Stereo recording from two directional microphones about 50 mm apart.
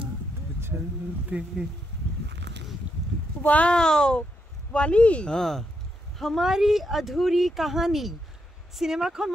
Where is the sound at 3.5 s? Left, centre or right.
Left.